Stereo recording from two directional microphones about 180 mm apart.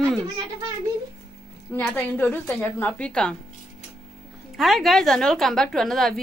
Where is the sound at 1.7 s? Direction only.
10° left (ahead or behind).